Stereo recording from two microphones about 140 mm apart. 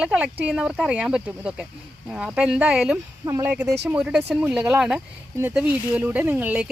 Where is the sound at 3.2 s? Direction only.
20° right (ahead or behind).